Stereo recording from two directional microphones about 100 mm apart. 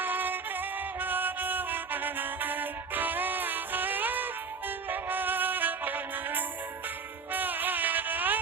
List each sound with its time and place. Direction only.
0.0 s music: 20° right (ahead or behind)